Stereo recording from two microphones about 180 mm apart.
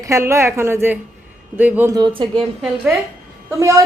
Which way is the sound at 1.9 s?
25° right (ahead or behind).